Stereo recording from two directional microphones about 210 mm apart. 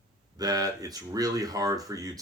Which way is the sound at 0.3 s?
15° right (ahead or behind).